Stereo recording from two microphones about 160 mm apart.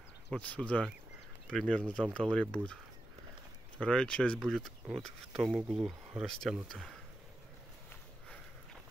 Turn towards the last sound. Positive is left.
turn(degrees=0)  # may be behind; listen again after turning